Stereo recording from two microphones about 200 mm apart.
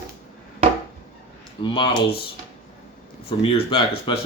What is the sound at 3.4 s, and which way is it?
Speech, 30° left (ahead or behind).